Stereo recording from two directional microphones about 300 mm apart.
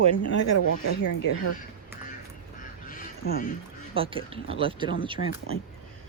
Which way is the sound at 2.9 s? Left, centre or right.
Left.